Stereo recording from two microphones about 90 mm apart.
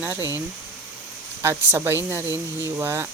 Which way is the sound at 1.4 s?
25° right (ahead or behind).